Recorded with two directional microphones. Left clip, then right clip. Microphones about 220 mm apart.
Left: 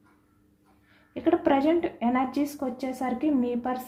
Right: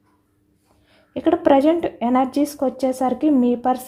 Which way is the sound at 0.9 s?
45° right (ahead or behind).